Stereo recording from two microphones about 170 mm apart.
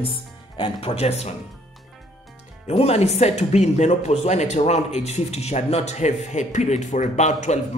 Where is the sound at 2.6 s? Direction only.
40° left (ahead or behind).